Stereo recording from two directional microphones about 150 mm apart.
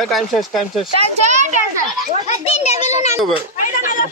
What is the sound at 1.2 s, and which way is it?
Speech, 50° right (ahead or behind).